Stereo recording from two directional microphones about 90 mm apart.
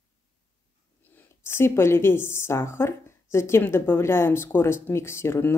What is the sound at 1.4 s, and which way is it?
A woman's voice, 30° left (ahead or behind).